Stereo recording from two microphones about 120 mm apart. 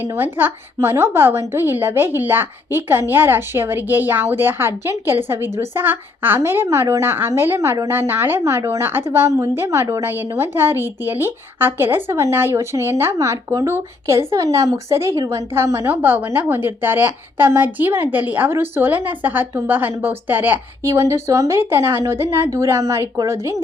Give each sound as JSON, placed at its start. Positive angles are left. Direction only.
{"t": 0.0, "sound": "a woman's voice", "side_deg": -15}